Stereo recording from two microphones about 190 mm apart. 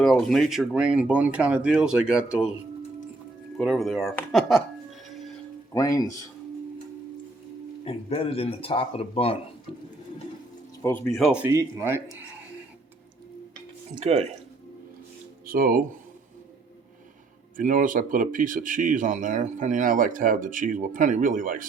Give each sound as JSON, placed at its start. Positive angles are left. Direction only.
{"t": 0.0, "sound": "speech", "side_deg": 0}
{"t": 3.6, "sound": "speech", "side_deg": 0}
{"t": 5.0, "sound": "music", "side_deg": 0}
{"t": 5.7, "sound": "speech", "side_deg": 20}
{"t": 7.9, "sound": "speech", "side_deg": 30}
{"t": 10.8, "sound": "speech", "side_deg": 10}
{"t": 11.1, "sound": "speech", "side_deg": -5}
{"t": 14.0, "sound": "speech", "side_deg": -35}
{"t": 15.4, "sound": "speech", "side_deg": -50}
{"t": 17.6, "sound": "speech", "side_deg": -45}